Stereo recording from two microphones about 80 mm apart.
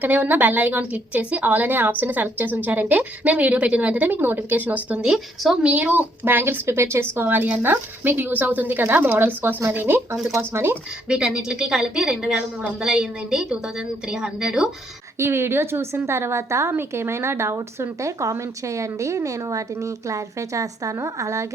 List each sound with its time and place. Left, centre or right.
0.0 s a woman's voice: right
11.1 s a woman's voice: centre
15.2 s a woman's voice: right